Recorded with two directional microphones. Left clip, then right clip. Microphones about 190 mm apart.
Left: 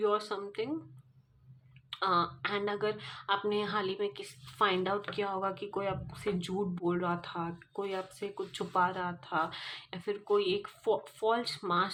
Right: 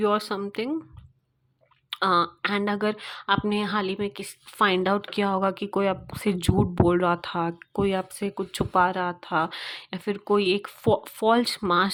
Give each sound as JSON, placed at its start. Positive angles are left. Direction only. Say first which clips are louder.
{"t": 0.0, "sound": "speech", "louder": "right 7 dB", "side_deg": -50}
{"t": 1.9, "sound": "speech", "louder": "right 8 dB", "side_deg": -45}